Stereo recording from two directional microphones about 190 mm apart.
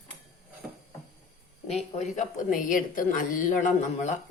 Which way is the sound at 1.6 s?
35° left (ahead or behind).